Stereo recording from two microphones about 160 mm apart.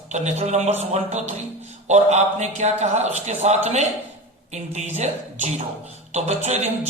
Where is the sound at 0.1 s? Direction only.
45° right (ahead or behind).